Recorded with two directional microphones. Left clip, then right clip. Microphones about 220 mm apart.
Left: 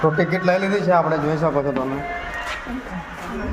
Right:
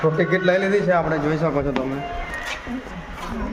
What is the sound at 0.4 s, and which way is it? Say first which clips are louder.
A man's voice: even; 5° left (ahead or behind).